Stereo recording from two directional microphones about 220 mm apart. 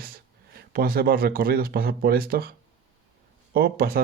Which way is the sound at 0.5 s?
40° right (ahead or behind).